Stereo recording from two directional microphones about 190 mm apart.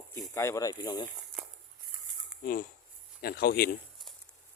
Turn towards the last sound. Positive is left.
turn(degrees=55)  # may be behind; listen again after turning